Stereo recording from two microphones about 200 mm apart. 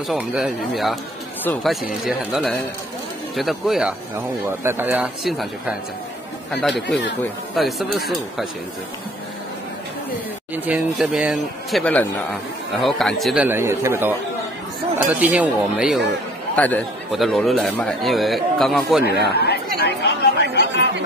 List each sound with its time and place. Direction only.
0.1 s a man's voice: 5° right (ahead or behind)
7.2 s a man's voice: centre (ahead or behind)
10.5 s a man's voice: 10° right (ahead or behind)
16.5 s a man's voice: 5° left (ahead or behind)
19.0 s speech: 55° left (ahead or behind)
19.8 s chatter: 55° left (ahead or behind)